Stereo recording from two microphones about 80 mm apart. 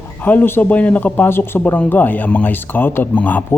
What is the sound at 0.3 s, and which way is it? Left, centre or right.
Speech, left.